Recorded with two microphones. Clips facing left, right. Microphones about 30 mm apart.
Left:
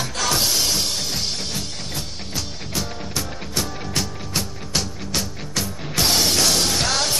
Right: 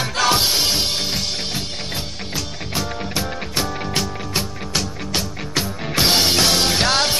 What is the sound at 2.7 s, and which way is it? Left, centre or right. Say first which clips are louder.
Music: right 3 dB; right.